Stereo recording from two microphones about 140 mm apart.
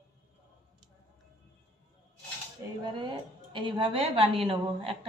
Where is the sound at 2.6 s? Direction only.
20° right (ahead or behind).